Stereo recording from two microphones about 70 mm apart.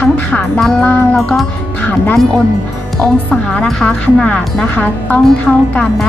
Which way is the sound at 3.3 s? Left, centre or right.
Centre.